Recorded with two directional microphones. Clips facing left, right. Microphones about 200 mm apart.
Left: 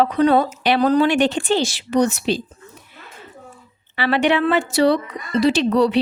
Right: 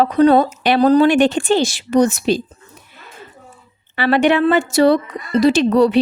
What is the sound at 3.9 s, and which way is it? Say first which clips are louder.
A woman's voice: right 4 dB; 45° right (ahead or behind).